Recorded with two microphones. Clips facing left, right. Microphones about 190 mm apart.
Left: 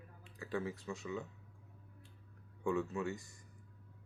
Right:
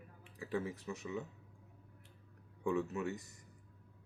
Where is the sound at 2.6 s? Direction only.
15° right (ahead or behind).